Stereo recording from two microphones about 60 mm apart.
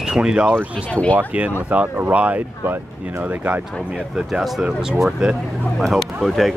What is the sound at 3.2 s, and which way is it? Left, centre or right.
Speech, right.